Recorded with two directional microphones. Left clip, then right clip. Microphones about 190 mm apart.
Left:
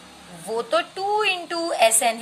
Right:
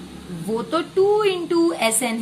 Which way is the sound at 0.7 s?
25° left (ahead or behind).